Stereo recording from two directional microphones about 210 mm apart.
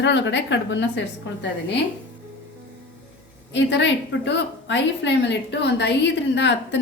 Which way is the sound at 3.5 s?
60° left (ahead or behind).